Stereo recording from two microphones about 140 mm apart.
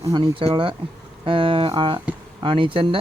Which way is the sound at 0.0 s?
35° right (ahead or behind).